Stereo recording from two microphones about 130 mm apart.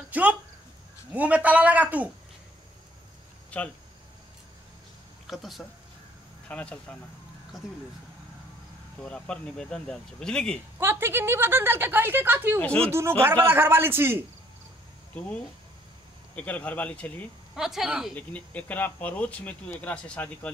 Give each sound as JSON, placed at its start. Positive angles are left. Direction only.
{"t": 0.1, "sound": "a woman's voice", "side_deg": -10}
{"t": 3.4, "sound": "a sound", "side_deg": 10}
{"t": 5.2, "sound": "speech", "side_deg": 0}
{"t": 6.5, "sound": "speech", "side_deg": 10}
{"t": 9.0, "sound": "speech", "side_deg": 5}
{"t": 10.8, "sound": "a woman's voice", "side_deg": -20}
{"t": 12.5, "sound": "speech", "side_deg": 10}
{"t": 13.2, "sound": "a woman's voice", "side_deg": -15}
{"t": 15.1, "sound": "speech", "side_deg": 10}
{"t": 17.6, "sound": "speech", "side_deg": -5}
{"t": 18.1, "sound": "speech", "side_deg": 10}